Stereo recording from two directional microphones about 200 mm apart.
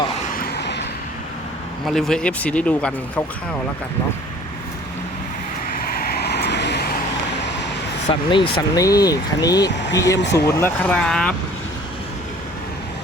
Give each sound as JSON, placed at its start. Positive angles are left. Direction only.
{"t": 0.3, "sound": "vehicle", "side_deg": 50}
{"t": 1.9, "sound": "speech", "side_deg": 0}
{"t": 5.7, "sound": "vehicle", "side_deg": 45}
{"t": 8.3, "sound": "speech", "side_deg": 25}